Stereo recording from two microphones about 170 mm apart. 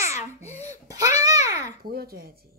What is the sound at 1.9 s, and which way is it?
Speech, 60° right (ahead or behind).